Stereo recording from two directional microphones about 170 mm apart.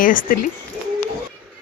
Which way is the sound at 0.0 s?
50° left (ahead or behind).